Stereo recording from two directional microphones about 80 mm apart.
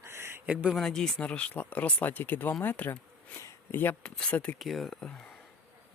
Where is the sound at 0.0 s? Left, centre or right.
Right.